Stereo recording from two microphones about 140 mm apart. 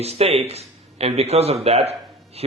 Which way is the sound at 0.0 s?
50° right (ahead or behind).